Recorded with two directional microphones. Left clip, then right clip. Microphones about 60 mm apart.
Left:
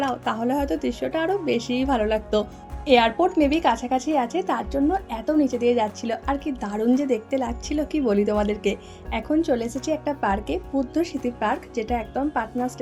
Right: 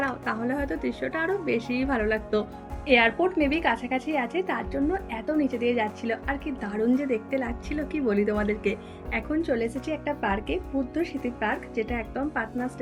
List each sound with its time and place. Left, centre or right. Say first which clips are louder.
0.0 s a woman's voice: left 4 dB; left
2.8 s a woman's voice: left 3 dB; left
6.6 s a woman's voice: left 1 dB; left
9.6 s a woman's voice: left 1 dB; left
9.9 s speech: left 6 dB; left